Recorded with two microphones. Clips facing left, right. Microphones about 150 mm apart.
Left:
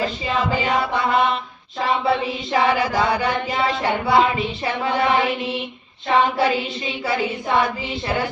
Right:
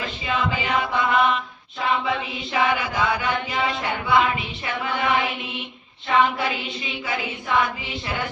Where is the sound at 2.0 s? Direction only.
35° left (ahead or behind).